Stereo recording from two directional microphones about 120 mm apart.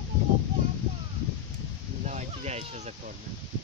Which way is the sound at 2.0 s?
80° right.